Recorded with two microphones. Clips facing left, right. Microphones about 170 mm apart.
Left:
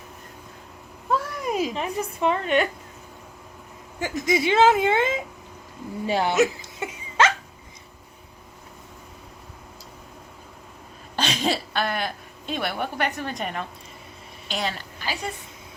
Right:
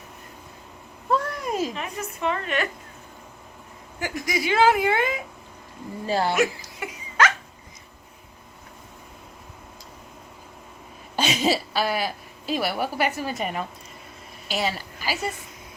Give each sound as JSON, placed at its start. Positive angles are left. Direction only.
{"t": 1.1, "sound": "a sound", "side_deg": 5}
{"t": 1.7, "sound": "a woman's voice", "side_deg": 30}
{"t": 4.0, "sound": "speech", "side_deg": 20}
{"t": 6.3, "sound": "laughter", "side_deg": 25}
{"t": 11.2, "sound": "a woman's voice", "side_deg": -5}